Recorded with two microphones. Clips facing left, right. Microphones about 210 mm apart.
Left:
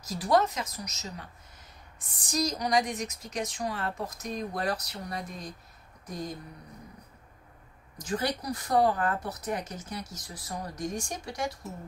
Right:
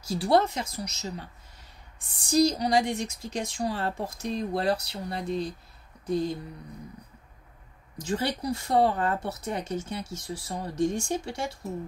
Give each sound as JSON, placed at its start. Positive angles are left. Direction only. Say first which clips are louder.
{"t": 0.1, "sound": "speech", "louder": "right 2 dB", "side_deg": -30}
{"t": 8.0, "sound": "speech", "louder": "right 2 dB", "side_deg": -25}